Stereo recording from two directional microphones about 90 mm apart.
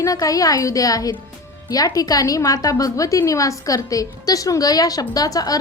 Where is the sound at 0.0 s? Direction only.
40° left (ahead or behind).